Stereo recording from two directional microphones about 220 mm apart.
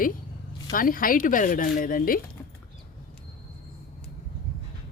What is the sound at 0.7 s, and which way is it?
A woman's voice, 40° left (ahead or behind).